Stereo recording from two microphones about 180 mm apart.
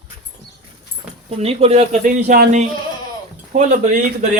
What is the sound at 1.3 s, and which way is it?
Speech, 35° right (ahead or behind).